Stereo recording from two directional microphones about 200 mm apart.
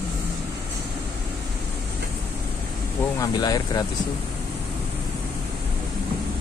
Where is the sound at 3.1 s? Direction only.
20° left (ahead or behind).